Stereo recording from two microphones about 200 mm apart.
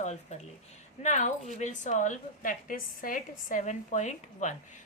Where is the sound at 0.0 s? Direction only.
35° left (ahead or behind).